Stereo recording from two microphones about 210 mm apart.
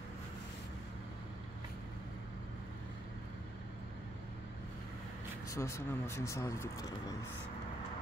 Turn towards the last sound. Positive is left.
turn(degrees=15)  # may be behind; listen again after turning